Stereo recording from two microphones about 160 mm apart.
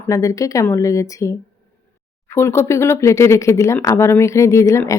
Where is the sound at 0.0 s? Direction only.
20° left (ahead or behind).